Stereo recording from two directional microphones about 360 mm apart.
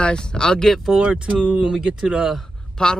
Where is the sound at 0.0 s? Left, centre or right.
Centre.